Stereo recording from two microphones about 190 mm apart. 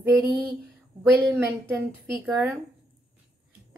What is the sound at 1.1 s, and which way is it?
Speech, 10° right (ahead or behind).